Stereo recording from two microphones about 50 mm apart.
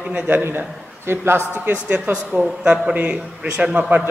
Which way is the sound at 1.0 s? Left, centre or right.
Right.